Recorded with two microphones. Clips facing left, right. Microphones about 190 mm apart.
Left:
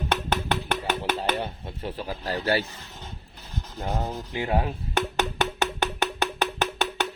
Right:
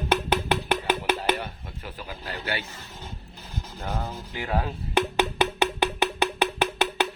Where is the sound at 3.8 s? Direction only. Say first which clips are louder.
Left 3 dB; 30° left (ahead or behind).